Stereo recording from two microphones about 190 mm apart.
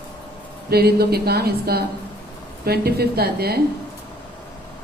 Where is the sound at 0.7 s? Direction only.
55° right (ahead or behind).